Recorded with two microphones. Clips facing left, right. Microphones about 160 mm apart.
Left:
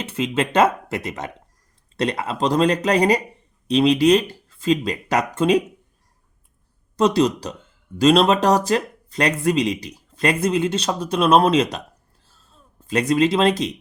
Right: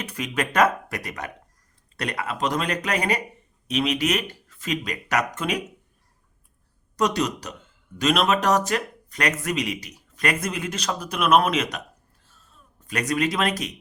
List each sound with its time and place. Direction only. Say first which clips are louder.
0.0 s speech: left 5 dB; 25° left (ahead or behind)
6.9 s speech: left 6 dB; 30° left (ahead or behind)
12.2 s a sound: left 3 dB; 30° left (ahead or behind)